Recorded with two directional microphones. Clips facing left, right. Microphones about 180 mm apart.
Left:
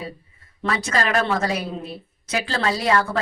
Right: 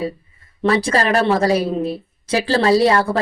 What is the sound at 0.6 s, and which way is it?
A woman's voice, 30° right (ahead or behind).